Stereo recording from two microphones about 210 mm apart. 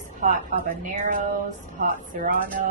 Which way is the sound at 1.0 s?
35° right (ahead or behind).